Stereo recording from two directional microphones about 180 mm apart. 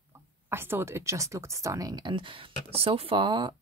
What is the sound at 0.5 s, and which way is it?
Speech, 15° right (ahead or behind).